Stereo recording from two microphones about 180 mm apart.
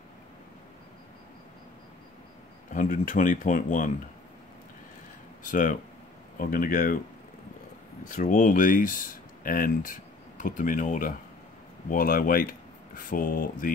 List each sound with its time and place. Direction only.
2.7 s speech: 45° left (ahead or behind)
5.4 s speech: 50° left (ahead or behind)
8.1 s speech: 45° left (ahead or behind)